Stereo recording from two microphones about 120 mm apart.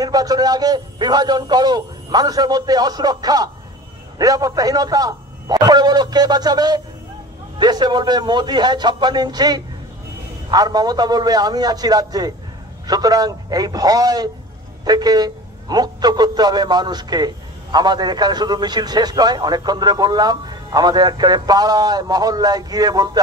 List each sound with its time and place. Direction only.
0.0 s a man's voice: 30° right (ahead or behind)